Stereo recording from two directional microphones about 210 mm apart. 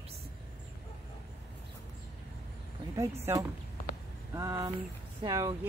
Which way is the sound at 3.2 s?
10° right (ahead or behind).